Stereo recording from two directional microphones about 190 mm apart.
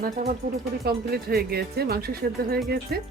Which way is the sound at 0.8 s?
55° right (ahead or behind).